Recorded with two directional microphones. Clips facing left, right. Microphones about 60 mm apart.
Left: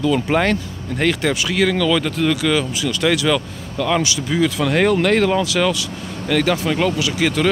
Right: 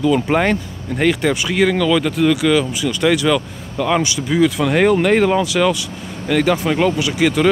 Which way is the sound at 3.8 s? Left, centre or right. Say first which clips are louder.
Right 2 dB; centre.